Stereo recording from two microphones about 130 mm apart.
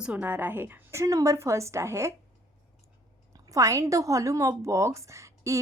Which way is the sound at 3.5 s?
25° right (ahead or behind).